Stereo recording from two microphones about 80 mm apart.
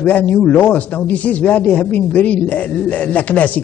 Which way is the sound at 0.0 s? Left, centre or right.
Centre.